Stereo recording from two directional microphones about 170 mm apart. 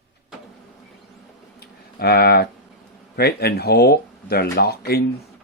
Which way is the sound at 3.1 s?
70° left (ahead or behind).